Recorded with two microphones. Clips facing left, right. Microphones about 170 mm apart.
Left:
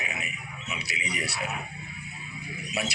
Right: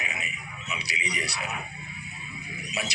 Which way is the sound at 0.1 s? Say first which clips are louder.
Left 1 dB; 50° left (ahead or behind).